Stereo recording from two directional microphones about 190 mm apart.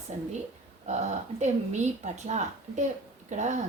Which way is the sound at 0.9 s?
35° right (ahead or behind).